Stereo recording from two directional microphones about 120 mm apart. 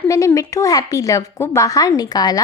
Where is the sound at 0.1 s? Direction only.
30° left (ahead or behind).